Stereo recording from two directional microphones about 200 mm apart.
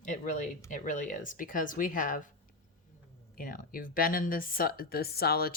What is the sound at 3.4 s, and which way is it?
Speech, 45° left (ahead or behind).